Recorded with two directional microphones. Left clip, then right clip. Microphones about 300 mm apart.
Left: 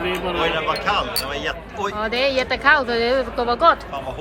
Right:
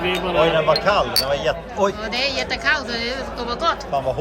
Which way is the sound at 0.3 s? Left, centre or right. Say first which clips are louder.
Right 7 dB; right.